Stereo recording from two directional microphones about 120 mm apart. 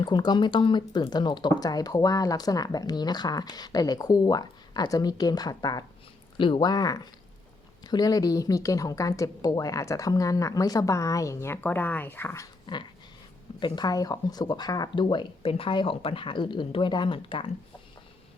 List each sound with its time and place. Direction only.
0.0 s speech: 35° left (ahead or behind)
6.3 s a woman's voice: 45° left (ahead or behind); by 12.5 s 20° left (ahead or behind)
12.6 s dog: 40° left (ahead or behind)
13.6 s speech: 40° left (ahead or behind)